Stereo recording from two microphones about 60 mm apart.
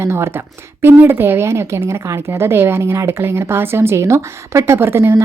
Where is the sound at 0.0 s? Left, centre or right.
Right.